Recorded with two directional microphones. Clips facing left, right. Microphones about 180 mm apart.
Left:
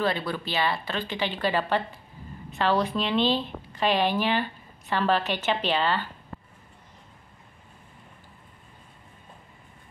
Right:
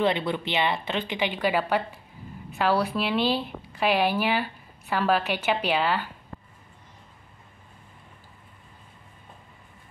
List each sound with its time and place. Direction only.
0.0 s a woman's voice: 20° right (ahead or behind)